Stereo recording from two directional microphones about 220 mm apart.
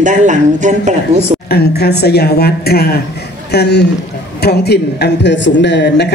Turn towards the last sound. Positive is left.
turn(degrees=50)  # may be behind; listen again after turning